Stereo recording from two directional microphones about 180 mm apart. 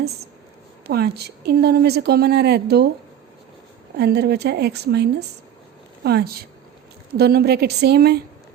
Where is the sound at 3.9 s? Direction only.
65° right (ahead or behind).